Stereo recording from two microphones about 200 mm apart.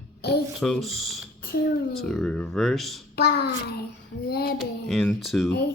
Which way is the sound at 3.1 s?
55° left (ahead or behind).